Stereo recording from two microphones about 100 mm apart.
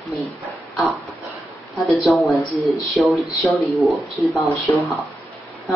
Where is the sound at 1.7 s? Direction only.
Centre (ahead or behind).